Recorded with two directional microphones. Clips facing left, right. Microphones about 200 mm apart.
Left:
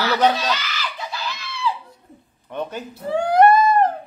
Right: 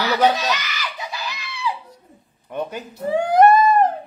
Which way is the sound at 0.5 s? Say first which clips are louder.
Even; 15° right (ahead or behind).